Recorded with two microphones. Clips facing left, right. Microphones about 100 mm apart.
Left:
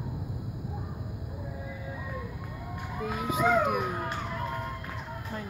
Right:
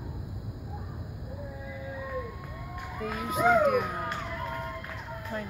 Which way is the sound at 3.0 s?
5° left (ahead or behind).